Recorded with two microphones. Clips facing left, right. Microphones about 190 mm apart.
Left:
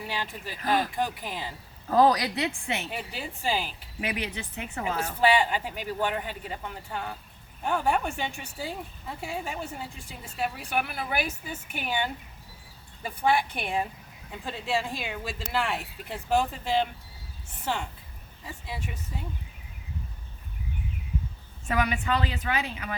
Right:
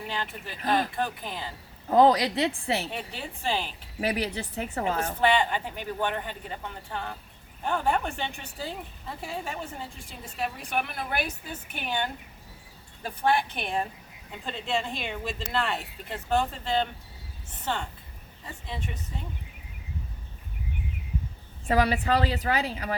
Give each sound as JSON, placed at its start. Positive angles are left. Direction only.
{"t": 0.7, "sound": "speech", "side_deg": 10}
{"t": 1.9, "sound": "a woman's voice", "side_deg": -20}
{"t": 2.9, "sound": "speech", "side_deg": 5}
{"t": 4.0, "sound": "speech", "side_deg": -35}
{"t": 5.2, "sound": "speech", "side_deg": 10}
{"t": 18.4, "sound": "speech", "side_deg": 5}
{"t": 21.7, "sound": "speech", "side_deg": -35}